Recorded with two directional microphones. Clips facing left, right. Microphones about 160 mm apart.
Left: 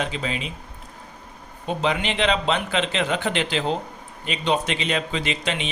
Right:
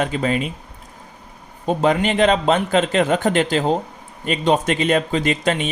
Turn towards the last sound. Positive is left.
turn(degrees=-50)  # may be behind; listen again after turning